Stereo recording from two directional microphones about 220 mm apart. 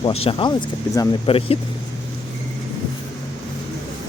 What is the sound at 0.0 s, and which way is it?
Speech, 25° left (ahead or behind).